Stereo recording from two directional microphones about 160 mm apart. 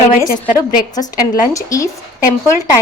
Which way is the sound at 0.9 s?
25° left (ahead or behind).